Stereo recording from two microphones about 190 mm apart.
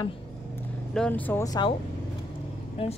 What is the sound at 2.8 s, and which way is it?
Speech, 30° left (ahead or behind).